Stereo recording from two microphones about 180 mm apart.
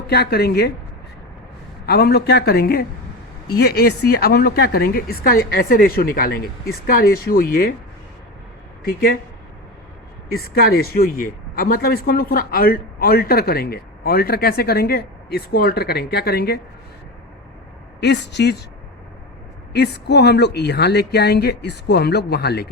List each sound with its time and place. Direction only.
0.1 s speech: 60° left (ahead or behind)
1.9 s speech: 60° left (ahead or behind)
8.8 s speech: 60° left (ahead or behind)
10.3 s speech: 60° left (ahead or behind)
18.0 s speech: 70° left (ahead or behind)
19.7 s speech: 70° left (ahead or behind)